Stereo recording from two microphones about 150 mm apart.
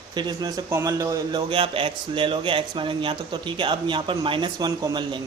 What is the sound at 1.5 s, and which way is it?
Speech, 35° right (ahead or behind).